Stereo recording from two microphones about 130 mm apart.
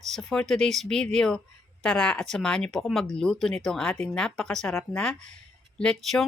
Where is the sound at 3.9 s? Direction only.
15° left (ahead or behind).